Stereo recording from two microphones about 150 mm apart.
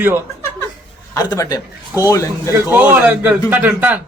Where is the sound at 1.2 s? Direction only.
20° left (ahead or behind).